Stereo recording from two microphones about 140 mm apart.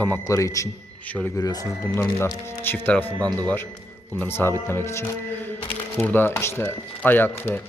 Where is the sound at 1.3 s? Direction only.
25° left (ahead or behind).